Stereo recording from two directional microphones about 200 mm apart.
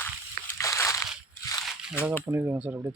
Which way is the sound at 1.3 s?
15° left (ahead or behind).